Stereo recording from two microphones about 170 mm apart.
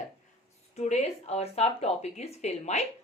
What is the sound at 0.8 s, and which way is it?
Speech, 40° left (ahead or behind).